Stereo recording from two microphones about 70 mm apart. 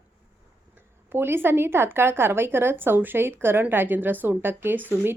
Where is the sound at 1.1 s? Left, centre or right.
Right.